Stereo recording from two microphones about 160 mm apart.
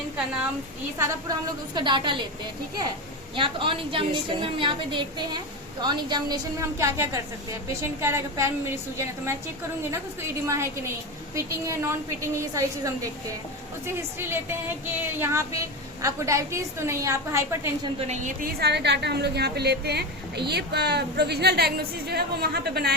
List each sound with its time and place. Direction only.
1.7 s a woman's voice: 30° right (ahead or behind)
18.0 s a woman's voice: 45° right (ahead or behind)
18.6 s a woman's voice: 90° right